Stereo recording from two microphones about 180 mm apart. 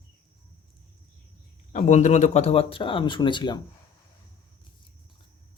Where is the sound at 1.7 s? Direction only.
40° left (ahead or behind); by 3.5 s 25° left (ahead or behind).